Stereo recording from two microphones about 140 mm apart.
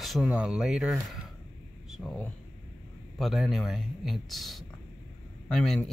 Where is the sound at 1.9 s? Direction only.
Centre (ahead or behind).